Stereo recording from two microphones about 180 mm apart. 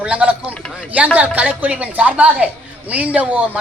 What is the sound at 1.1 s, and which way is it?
A woman's voice, 10° right (ahead or behind).